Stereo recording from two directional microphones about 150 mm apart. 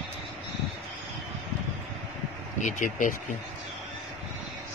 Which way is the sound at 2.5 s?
55° left (ahead or behind).